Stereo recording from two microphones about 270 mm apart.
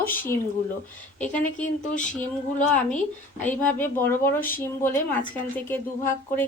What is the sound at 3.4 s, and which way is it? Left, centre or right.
A woman's voice, centre.